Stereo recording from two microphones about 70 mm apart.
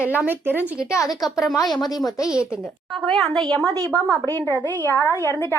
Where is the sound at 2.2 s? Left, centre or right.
Centre.